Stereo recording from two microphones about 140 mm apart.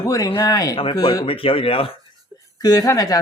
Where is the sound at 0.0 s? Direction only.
25° left (ahead or behind).